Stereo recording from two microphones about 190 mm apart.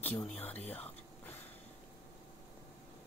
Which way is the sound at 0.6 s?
10° left (ahead or behind).